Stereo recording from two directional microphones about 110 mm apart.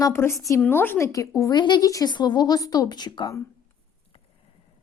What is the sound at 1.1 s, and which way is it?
Speech, 30° left (ahead or behind).